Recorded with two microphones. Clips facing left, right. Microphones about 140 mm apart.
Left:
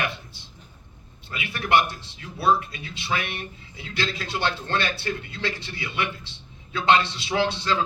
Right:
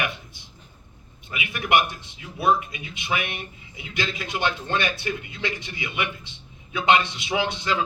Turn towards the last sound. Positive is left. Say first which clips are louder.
# left 1 dB
turn(degrees=-15)  # may be behind; listen again after turning